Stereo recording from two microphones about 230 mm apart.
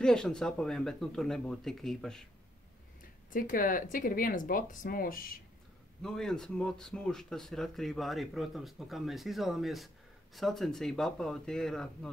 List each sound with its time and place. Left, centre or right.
0.0 s speech: centre
3.3 s speech: left
6.0 s speech: centre